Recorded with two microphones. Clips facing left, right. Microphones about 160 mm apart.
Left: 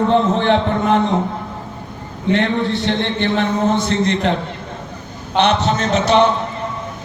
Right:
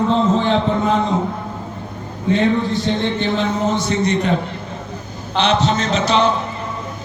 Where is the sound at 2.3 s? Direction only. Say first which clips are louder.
Right 1 dB; 75° left (ahead or behind).